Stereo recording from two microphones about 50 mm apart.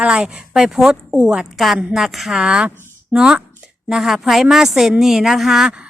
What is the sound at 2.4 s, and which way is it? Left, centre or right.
Speech, centre.